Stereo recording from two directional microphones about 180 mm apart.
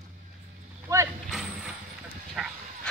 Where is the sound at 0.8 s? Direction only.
20° right (ahead or behind).